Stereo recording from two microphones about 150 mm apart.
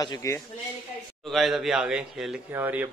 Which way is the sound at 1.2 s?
Centre (ahead or behind).